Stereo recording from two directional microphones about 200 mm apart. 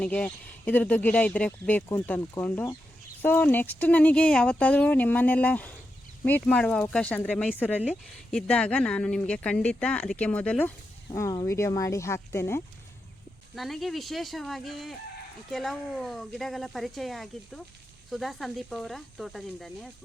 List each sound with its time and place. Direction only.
0.0 s speech: 5° left (ahead or behind)
7.8 s speech: centre (ahead or behind)
13.6 s speech: centre (ahead or behind)